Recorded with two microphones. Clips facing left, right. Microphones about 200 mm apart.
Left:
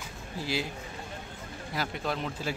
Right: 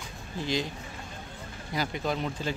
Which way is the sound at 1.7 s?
Centre (ahead or behind).